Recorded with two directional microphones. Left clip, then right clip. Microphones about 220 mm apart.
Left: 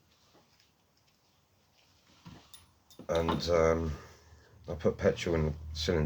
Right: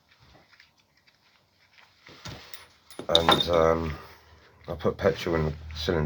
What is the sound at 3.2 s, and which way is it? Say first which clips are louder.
Speech: right 7 dB; 35° left (ahead or behind).